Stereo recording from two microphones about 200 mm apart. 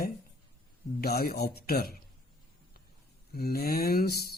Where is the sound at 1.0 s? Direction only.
50° left (ahead or behind).